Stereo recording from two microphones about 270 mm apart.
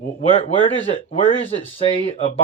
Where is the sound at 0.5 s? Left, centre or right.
Left.